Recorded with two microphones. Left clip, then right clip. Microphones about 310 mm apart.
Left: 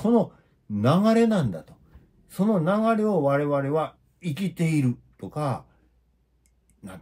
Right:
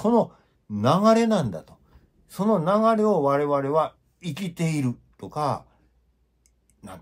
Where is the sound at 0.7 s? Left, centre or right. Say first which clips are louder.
Right 3 dB; centre.